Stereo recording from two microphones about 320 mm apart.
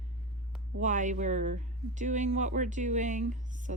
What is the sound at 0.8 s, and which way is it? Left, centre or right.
Speech, right.